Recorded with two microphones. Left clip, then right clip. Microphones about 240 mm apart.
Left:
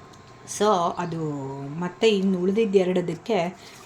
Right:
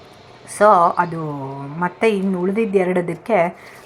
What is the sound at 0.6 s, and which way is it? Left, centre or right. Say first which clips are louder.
Speech: right 10 dB; centre.